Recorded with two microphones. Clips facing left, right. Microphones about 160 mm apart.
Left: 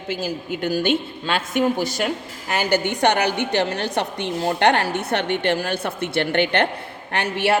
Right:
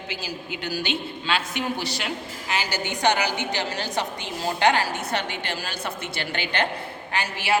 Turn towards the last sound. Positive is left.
turn(degrees=60)  # may be behind; listen again after turning